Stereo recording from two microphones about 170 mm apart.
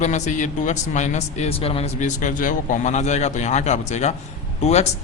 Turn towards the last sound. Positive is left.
turn(degrees=40)  # may be behind; listen again after turning